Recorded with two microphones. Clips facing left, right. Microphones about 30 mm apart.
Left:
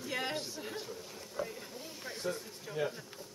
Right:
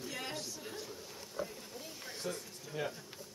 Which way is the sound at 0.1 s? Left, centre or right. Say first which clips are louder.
Left 9 dB; left.